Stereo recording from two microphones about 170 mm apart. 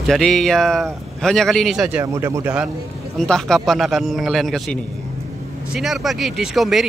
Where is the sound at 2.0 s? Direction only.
15° right (ahead or behind).